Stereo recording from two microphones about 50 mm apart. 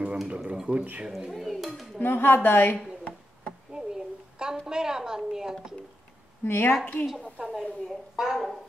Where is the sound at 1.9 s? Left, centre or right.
Left.